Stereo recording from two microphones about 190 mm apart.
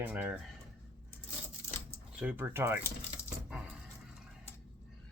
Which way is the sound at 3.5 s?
5° right (ahead or behind).